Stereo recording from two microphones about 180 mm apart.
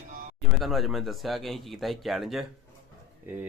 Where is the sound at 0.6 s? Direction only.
Centre (ahead or behind).